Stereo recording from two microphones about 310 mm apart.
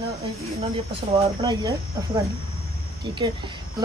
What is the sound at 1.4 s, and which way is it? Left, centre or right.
Speech, centre.